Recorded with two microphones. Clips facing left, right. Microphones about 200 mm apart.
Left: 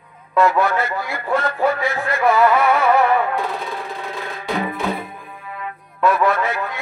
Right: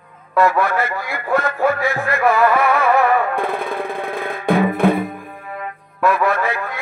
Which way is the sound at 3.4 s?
55° right (ahead or behind).